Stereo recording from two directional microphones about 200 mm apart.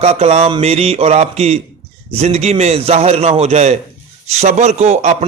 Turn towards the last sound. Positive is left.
turn(degrees=-35)  # may be behind; listen again after turning